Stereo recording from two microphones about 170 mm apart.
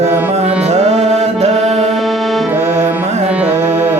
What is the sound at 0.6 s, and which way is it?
Music, 40° right (ahead or behind).